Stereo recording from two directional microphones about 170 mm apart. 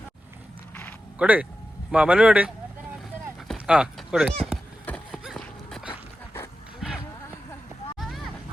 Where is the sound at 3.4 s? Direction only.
5° right (ahead or behind).